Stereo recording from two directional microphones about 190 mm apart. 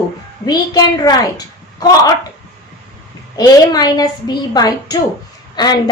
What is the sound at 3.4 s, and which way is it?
Speech, 20° left (ahead or behind).